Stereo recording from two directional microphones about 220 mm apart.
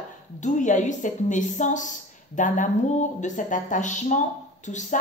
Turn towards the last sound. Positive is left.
turn(degrees=35)  # may be behind; listen again after turning